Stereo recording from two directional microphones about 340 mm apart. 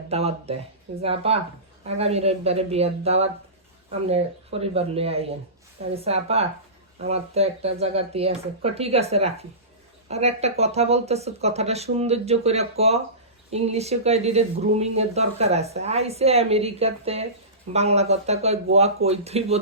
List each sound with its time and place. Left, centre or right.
0.1 s speech: centre